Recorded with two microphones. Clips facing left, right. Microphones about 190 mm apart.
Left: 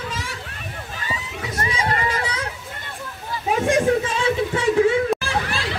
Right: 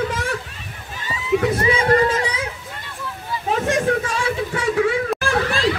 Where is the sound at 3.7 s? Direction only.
20° left (ahead or behind).